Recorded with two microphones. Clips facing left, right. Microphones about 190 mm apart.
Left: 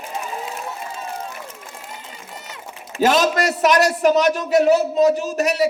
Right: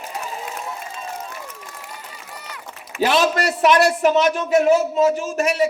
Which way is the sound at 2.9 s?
40° left (ahead or behind).